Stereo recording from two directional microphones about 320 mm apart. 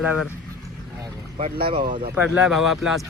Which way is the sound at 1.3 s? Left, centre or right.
Right.